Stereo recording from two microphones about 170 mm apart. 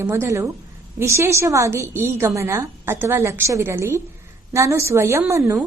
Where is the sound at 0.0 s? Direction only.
15° right (ahead or behind).